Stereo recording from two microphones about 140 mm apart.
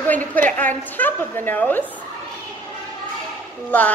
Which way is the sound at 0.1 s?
10° left (ahead or behind).